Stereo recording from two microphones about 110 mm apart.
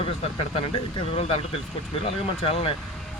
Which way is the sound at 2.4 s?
60° left (ahead or behind).